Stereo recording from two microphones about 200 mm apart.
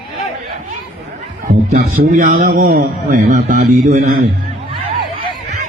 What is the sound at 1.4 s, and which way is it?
A man's voice, 45° right (ahead or behind).